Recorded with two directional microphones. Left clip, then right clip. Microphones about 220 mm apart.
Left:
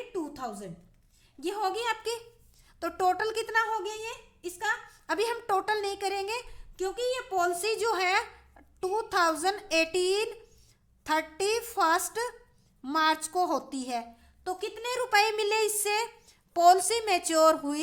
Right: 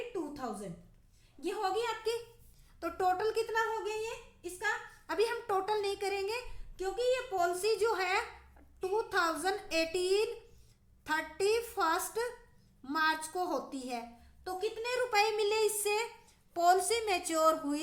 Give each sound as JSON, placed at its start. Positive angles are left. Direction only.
{"t": 0.1, "sound": "a sound", "side_deg": 45}
{"t": 1.4, "sound": "a woman's voice", "side_deg": 45}
{"t": 5.0, "sound": "a woman's voice", "side_deg": 40}